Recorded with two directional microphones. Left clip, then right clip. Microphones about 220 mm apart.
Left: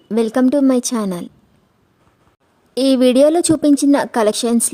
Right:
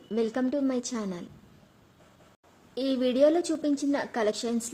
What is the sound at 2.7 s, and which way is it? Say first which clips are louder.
A woman's voice: left 14 dB; 55° left (ahead or behind).